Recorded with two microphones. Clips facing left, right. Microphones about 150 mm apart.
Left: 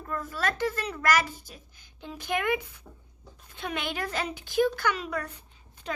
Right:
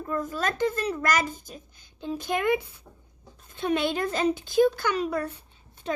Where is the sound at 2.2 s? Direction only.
25° right (ahead or behind).